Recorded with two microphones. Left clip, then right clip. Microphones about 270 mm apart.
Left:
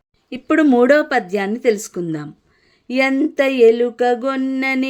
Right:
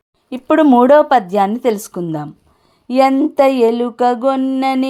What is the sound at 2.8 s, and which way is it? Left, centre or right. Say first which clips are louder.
A woman's voice: right 5 dB; centre.